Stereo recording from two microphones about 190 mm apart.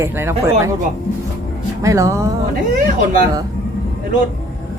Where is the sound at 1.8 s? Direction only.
15° right (ahead or behind).